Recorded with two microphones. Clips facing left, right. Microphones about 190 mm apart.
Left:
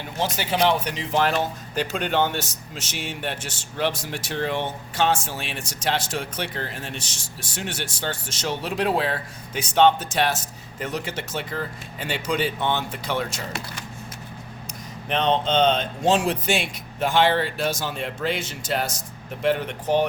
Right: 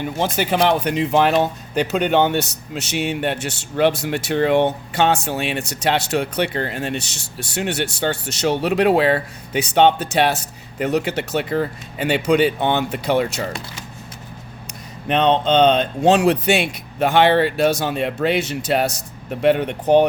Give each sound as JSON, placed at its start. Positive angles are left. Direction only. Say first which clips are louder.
{"t": 0.2, "sound": "speech", "louder": "right 3 dB", "side_deg": -55}
{"t": 15.1, "sound": "speech", "louder": "right 5 dB", "side_deg": -65}